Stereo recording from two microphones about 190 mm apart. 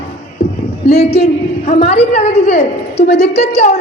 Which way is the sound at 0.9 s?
30° left (ahead or behind).